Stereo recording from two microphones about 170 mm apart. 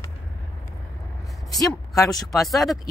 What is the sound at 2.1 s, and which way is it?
Speech, centre (ahead or behind).